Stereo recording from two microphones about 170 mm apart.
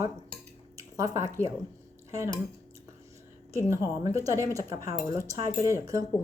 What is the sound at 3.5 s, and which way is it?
A woman's voice, 15° right (ahead or behind).